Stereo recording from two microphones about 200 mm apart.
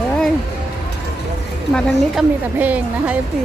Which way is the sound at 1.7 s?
5° right (ahead or behind).